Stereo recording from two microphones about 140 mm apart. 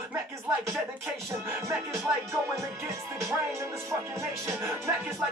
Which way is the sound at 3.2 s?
20° right (ahead or behind).